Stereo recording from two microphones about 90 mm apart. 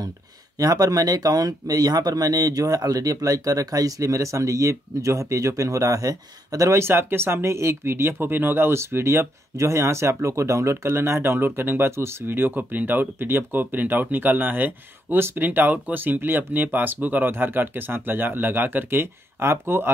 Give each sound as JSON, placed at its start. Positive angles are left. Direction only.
{"t": 0.6, "sound": "speech", "side_deg": -40}